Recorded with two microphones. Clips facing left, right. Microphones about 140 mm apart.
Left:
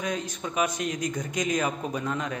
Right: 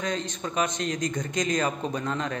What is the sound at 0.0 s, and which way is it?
A man's voice, 10° left (ahead or behind).